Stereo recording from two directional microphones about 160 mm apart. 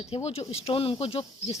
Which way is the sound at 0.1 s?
40° left (ahead or behind).